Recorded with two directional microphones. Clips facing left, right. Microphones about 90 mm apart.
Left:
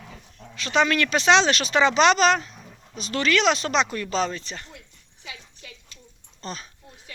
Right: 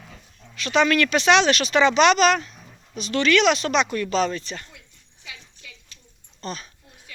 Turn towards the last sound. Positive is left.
turn(degrees=25)  # may be behind; listen again after turning